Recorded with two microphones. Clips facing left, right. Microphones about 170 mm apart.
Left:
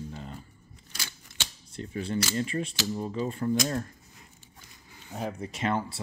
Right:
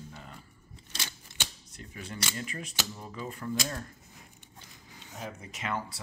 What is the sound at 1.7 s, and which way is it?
Speech, 30° left (ahead or behind).